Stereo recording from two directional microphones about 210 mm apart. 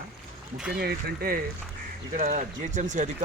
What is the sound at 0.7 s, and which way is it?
Speech, 45° right (ahead or behind).